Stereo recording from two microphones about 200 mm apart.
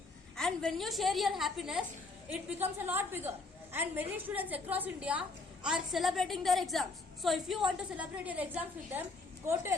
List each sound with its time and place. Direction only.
0.3 s a woman's voice: 5° left (ahead or behind)